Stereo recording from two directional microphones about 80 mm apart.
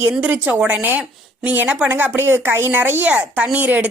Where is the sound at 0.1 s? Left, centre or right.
Centre.